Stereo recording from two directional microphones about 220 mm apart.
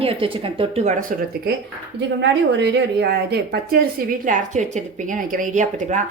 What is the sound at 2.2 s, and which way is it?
Speech, 50° right (ahead or behind).